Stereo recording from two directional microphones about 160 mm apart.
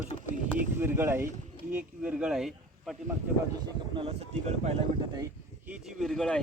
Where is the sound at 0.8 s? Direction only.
15° right (ahead or behind).